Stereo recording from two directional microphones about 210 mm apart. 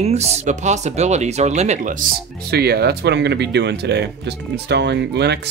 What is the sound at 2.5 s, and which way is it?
Speech, 50° right (ahead or behind).